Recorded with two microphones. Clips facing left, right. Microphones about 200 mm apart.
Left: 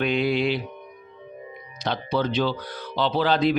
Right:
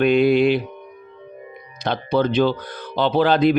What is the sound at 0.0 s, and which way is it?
Music, 50° right (ahead or behind).